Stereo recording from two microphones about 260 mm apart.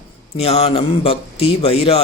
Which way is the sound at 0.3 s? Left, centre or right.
Left.